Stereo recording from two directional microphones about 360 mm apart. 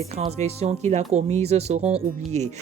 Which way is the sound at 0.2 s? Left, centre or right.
Centre.